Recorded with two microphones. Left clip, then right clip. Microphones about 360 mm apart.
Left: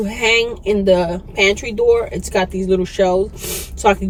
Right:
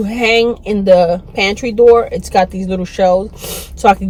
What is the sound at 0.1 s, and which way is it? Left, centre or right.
Speech, right.